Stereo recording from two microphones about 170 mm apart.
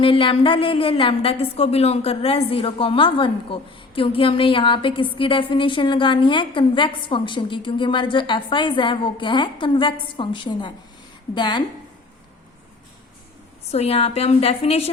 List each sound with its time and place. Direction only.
0.0 s a woman's voice: 30° left (ahead or behind)
13.7 s a woman's voice: 40° left (ahead or behind)